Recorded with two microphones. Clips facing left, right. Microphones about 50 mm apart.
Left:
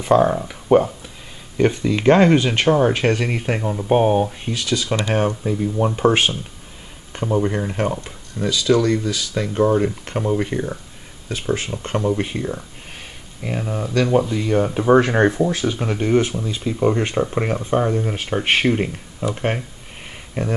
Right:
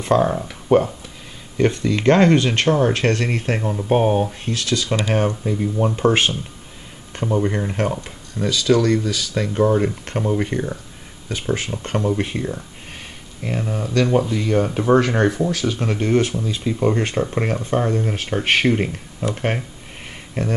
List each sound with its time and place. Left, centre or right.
0.0 s speech: centre
14.9 s speech: centre